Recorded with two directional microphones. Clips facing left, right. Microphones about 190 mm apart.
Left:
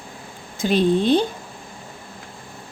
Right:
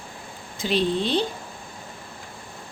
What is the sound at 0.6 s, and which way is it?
Speech, 50° left (ahead or behind).